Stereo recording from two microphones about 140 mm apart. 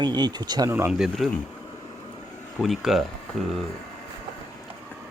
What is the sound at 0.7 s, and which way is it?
Speech, 15° right (ahead or behind).